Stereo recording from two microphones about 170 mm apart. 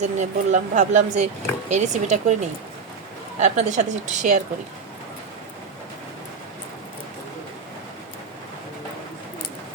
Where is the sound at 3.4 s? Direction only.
45° right (ahead or behind).